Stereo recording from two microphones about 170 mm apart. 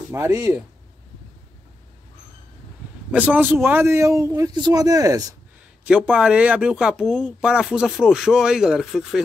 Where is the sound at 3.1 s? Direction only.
10° right (ahead or behind).